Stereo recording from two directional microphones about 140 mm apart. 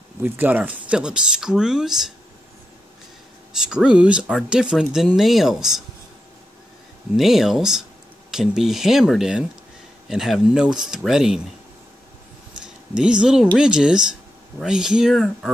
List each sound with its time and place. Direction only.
0.2 s speech: 10° right (ahead or behind)
3.5 s speech: 5° right (ahead or behind)
7.2 s speech: centre (ahead or behind)
12.6 s speech: 5° right (ahead or behind)